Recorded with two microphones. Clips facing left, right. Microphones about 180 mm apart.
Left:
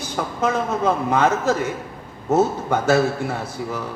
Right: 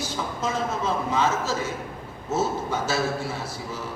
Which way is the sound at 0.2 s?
60° left (ahead or behind).